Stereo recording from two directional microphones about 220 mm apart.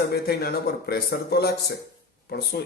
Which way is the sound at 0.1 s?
45° left (ahead or behind).